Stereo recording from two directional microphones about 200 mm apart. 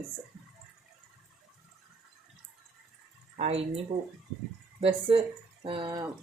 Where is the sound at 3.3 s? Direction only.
30° right (ahead or behind).